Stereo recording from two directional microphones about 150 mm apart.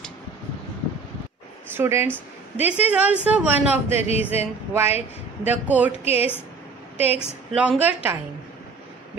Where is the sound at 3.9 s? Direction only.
45° left (ahead or behind).